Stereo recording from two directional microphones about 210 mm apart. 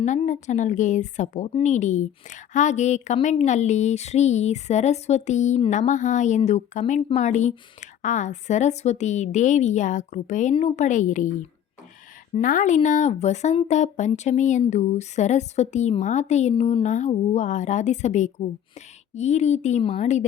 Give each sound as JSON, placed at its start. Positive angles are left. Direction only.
{"t": 0.0, "sound": "a woman's voice", "side_deg": 35}
{"t": 12.3, "sound": "a woman's voice", "side_deg": 40}